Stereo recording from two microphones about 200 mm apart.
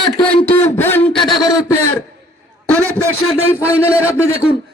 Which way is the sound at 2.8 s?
15° right (ahead or behind).